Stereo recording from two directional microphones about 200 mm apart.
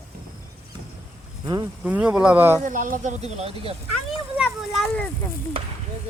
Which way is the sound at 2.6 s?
40° right (ahead or behind).